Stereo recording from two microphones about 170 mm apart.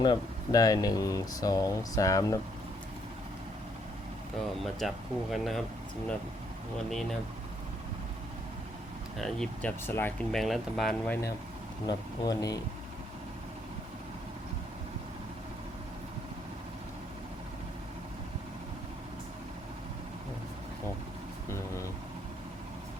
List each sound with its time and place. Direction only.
0.0 s speech: 25° left (ahead or behind)
4.6 s speech: centre (ahead or behind)
9.1 s speech: 5° left (ahead or behind)
10.3 s speech: centre (ahead or behind)
11.9 s speech: 25° left (ahead or behind)